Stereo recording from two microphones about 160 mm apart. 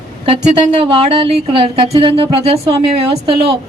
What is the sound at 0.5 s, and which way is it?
Speech, 35° right (ahead or behind).